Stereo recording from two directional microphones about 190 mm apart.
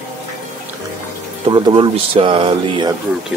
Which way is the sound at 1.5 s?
25° right (ahead or behind).